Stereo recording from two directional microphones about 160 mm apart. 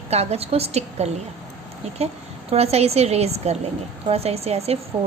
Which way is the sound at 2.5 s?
40° right (ahead or behind).